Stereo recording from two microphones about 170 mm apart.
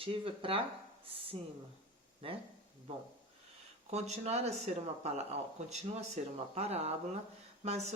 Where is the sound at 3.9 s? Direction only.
40° right (ahead or behind).